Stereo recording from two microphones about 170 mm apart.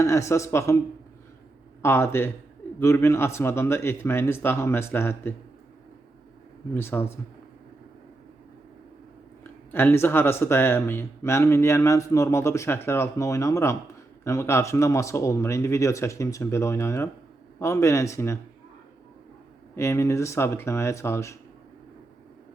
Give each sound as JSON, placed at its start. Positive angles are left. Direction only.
{"t": 0.0, "sound": "speech", "side_deg": 15}
{"t": 1.8, "sound": "speech", "side_deg": 15}
{"t": 6.7, "sound": "speech", "side_deg": 15}
{"t": 9.4, "sound": "speech", "side_deg": 15}
{"t": 19.7, "sound": "speech", "side_deg": 15}